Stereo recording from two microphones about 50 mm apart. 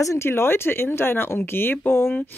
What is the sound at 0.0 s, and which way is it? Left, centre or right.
Speech, left.